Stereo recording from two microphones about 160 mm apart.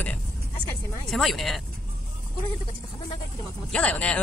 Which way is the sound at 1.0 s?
Centre (ahead or behind).